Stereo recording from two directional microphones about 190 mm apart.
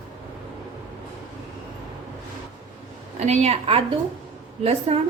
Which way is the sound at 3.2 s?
35° right (ahead or behind).